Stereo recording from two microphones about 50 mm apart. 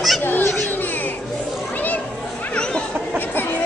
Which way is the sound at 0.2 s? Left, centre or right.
Left.